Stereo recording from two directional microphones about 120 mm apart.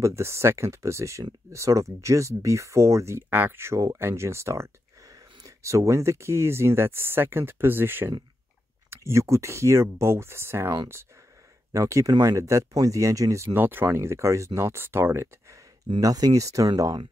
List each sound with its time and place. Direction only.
0.0 s speech: 20° right (ahead or behind)
16.0 s speech: 30° right (ahead or behind)